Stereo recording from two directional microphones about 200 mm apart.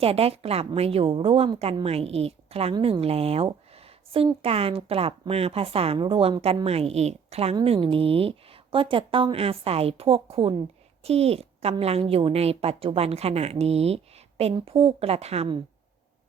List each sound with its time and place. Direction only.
0.0 s a woman's voice: 30° right (ahead or behind)